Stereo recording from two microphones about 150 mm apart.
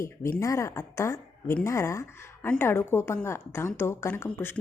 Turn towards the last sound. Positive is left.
turn(degrees=15)  # may be behind; listen again after turning